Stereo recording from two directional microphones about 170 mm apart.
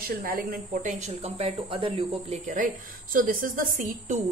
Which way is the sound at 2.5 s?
55° right (ahead or behind).